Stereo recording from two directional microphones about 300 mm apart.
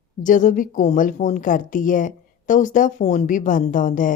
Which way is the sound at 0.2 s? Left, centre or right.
Left.